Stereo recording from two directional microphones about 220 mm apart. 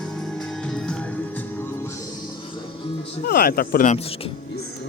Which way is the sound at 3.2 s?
45° left (ahead or behind).